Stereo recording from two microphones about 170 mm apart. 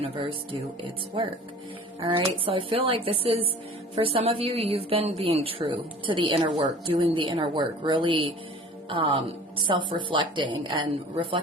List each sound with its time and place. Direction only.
0.0 s a woman's voice: 30° right (ahead or behind)